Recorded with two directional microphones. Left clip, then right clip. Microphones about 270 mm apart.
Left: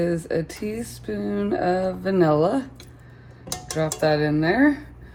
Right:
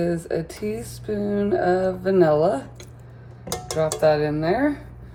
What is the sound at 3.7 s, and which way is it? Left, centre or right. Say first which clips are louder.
Speech: right 3 dB; left.